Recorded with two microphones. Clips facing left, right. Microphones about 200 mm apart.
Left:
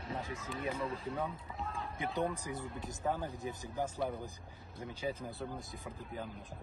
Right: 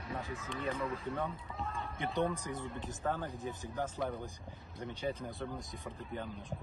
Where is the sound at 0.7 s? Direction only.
30° left (ahead or behind).